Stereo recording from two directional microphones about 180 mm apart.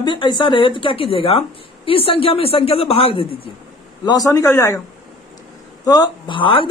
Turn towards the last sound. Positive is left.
turn(degrees=30)  # may be behind; listen again after turning